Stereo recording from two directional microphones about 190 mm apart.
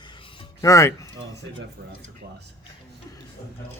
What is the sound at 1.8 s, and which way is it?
Speech, 55° right (ahead or behind).